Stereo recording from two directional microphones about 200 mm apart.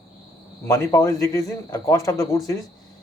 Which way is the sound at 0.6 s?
15° left (ahead or behind).